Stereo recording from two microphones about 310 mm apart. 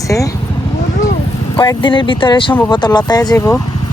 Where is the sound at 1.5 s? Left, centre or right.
Centre.